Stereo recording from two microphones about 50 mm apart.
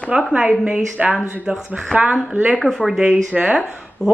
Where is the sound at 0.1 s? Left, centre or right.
Right.